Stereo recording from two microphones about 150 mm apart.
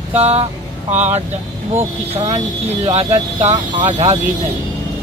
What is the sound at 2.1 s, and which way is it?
Speech, 40° right (ahead or behind).